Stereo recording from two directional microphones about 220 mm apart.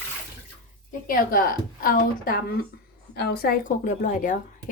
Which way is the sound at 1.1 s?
40° left (ahead or behind).